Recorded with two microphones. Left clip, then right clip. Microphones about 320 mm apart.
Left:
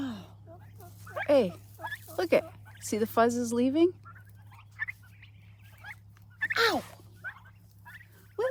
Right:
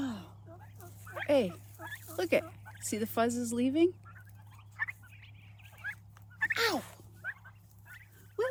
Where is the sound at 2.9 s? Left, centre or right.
Centre.